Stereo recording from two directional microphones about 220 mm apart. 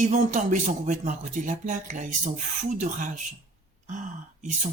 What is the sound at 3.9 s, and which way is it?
Throat clearing, 35° right (ahead or behind).